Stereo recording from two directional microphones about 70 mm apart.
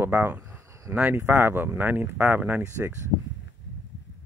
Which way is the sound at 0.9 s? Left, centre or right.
Right.